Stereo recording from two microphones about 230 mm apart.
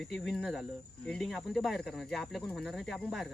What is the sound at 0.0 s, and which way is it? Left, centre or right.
Speech, centre.